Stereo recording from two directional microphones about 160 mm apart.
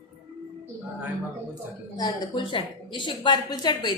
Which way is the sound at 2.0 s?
30° left (ahead or behind).